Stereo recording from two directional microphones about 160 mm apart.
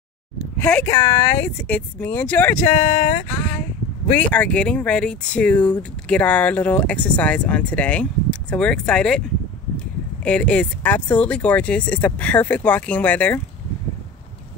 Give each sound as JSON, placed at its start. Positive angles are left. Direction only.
{"t": 0.6, "sound": "speech", "side_deg": 10}
{"t": 3.3, "sound": "a sound", "side_deg": 10}
{"t": 4.2, "sound": "speech", "side_deg": 10}
{"t": 10.2, "sound": "speech", "side_deg": 10}